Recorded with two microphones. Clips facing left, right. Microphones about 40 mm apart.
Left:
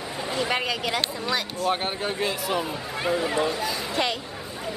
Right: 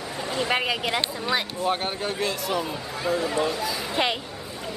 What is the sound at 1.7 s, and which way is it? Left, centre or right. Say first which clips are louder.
A man's voice: left 1 dB; centre.